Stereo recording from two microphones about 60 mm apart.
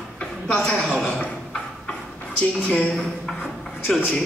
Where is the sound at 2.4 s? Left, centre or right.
Left.